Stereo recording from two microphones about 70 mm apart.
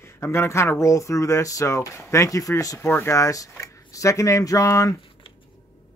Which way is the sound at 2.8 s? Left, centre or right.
Left.